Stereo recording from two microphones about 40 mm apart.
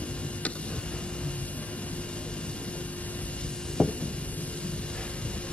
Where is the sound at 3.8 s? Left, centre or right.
Left.